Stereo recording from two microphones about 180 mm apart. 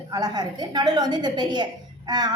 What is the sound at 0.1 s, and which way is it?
A woman's voice, 20° right (ahead or behind).